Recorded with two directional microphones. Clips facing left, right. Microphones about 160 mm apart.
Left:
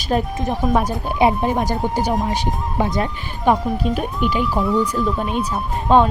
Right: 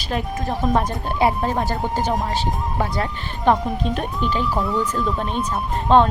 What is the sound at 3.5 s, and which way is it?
Speech, centre (ahead or behind).